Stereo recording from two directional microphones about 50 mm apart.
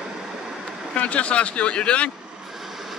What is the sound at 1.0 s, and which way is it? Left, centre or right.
Speech, left.